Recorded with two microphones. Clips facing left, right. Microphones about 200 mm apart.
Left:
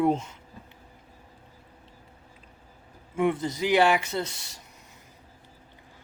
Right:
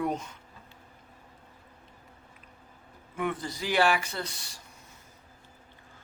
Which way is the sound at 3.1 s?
25° left (ahead or behind).